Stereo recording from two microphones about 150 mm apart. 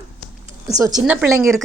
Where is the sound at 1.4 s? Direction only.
Centre (ahead or behind).